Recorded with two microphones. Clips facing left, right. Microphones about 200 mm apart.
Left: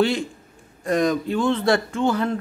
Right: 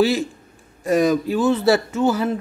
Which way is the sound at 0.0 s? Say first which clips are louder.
Right 3 dB; 5° right (ahead or behind).